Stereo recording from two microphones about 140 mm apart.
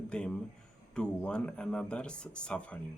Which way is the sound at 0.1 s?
5° left (ahead or behind).